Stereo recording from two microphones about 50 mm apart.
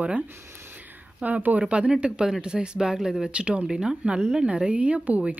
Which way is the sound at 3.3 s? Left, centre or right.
Right.